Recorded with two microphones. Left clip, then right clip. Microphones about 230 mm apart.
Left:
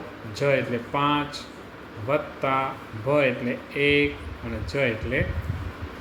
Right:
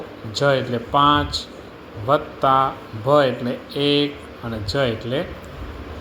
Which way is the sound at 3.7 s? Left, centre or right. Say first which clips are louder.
Right 2 dB; centre.